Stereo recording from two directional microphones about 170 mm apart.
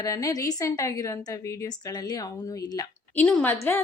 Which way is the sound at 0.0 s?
20° left (ahead or behind).